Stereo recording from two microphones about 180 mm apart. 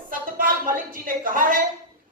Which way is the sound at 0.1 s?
50° right (ahead or behind).